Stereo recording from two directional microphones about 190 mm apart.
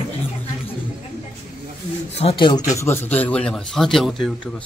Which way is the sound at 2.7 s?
15° left (ahead or behind).